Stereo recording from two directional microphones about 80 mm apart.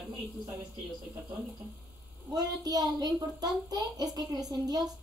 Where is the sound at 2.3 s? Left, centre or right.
Right.